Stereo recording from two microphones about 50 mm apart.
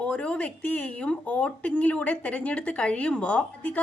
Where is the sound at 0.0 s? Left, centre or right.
Left.